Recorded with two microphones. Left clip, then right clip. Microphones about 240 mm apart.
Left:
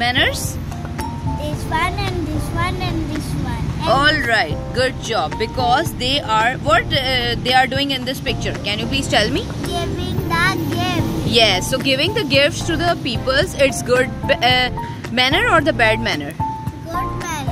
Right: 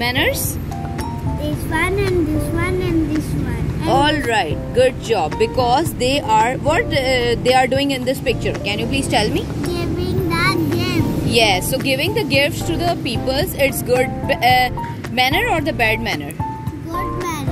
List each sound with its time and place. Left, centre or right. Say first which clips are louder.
0.0 s speech: left 1 dB; centre
1.7 s speech: right 1 dB; left
4.0 s speech: left 2 dB; centre
10.3 s a sound: left 1 dB; centre
12.9 s speech: left 2 dB; left